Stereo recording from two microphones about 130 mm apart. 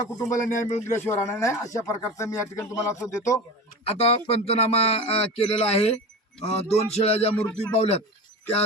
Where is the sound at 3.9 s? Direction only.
50° left (ahead or behind).